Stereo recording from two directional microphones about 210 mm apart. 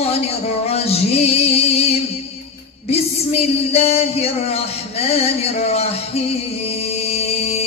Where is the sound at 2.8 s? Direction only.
30° left (ahead or behind).